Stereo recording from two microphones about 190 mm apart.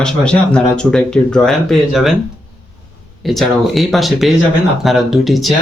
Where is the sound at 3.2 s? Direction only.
Centre (ahead or behind).